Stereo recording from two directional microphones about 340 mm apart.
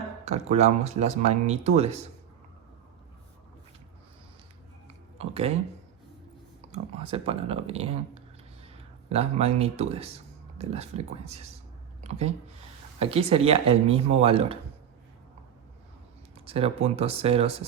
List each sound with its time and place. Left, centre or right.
0.3 s speech: centre
5.1 s speech: centre
6.7 s speech: centre
16.5 s speech: centre